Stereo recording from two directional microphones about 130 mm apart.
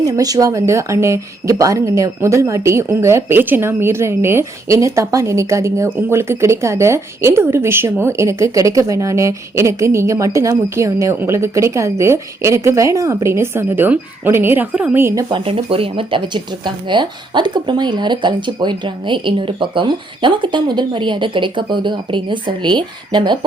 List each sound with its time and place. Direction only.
0.0 s speech: 30° right (ahead or behind)
15.3 s speech: 45° right (ahead or behind)